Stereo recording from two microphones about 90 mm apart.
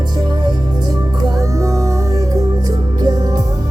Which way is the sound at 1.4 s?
40° right (ahead or behind).